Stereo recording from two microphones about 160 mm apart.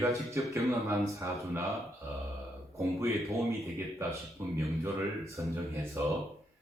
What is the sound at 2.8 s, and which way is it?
Speech, 20° right (ahead or behind).